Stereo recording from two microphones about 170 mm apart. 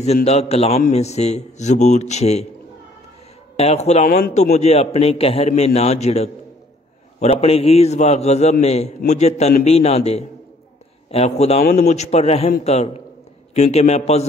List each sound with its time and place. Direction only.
0.0 s a man's voice: 40° left (ahead or behind)
3.5 s a man's voice: 40° left (ahead or behind)